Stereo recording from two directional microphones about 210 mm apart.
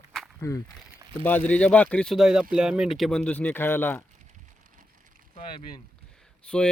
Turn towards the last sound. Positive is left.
turn(degrees=5)  # may be behind; listen again after turning